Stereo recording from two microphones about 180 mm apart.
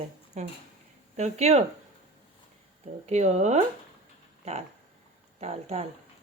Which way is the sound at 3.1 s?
40° right (ahead or behind).